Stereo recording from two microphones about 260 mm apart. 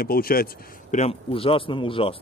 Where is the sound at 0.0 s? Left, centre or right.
Left.